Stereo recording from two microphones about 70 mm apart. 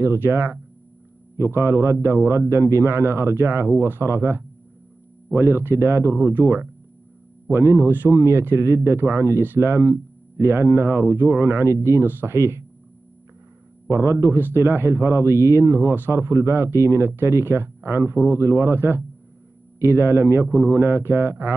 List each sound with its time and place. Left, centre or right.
0.0 s speech: right
13.8 s speech: right